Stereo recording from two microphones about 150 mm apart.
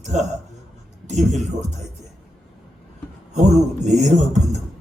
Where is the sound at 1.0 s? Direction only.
50° right (ahead or behind).